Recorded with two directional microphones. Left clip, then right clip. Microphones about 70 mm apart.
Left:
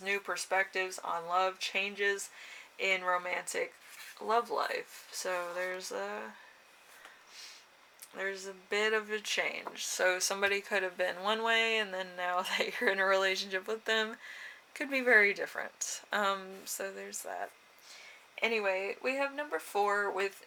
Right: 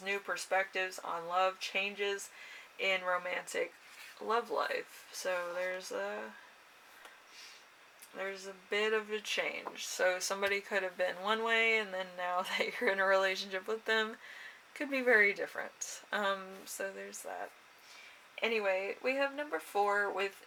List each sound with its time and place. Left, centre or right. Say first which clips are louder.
0.0 s speech: left 2 dB; left
5.4 s speech: left 1 dB; left
5.7 s speech: even; left
8.1 s speech: left 3 dB; left